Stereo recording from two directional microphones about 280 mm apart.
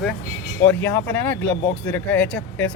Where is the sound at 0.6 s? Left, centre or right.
Centre.